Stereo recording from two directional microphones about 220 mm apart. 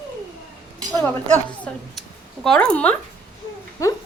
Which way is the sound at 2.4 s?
5° left (ahead or behind).